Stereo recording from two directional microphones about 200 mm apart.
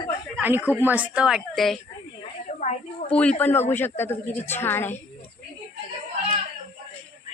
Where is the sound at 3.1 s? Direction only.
10° left (ahead or behind).